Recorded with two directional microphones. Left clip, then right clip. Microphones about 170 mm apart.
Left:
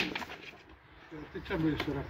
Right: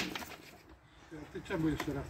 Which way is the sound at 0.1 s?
Centre (ahead or behind).